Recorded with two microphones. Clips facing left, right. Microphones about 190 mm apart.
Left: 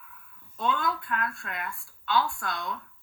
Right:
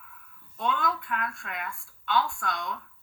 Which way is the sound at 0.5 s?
Centre (ahead or behind).